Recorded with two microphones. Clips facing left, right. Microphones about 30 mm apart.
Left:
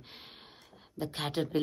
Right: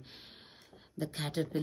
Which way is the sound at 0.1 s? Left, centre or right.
Centre.